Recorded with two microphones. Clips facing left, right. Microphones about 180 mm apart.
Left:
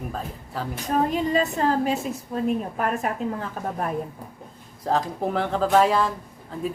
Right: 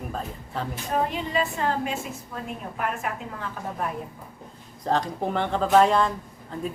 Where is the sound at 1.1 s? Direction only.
40° left (ahead or behind).